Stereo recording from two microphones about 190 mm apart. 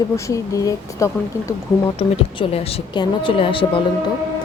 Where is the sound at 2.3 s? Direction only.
30° left (ahead or behind).